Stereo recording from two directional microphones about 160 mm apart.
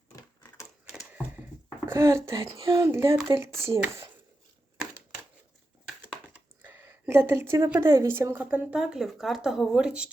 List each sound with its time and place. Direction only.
0.2 s typewriter: 20° left (ahead or behind)
1.9 s speech: 15° right (ahead or behind)
6.2 s a sound: 10° right (ahead or behind)
7.1 s speech: 15° right (ahead or behind)